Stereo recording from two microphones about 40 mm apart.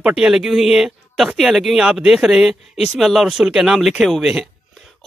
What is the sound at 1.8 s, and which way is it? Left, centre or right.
Speech, centre.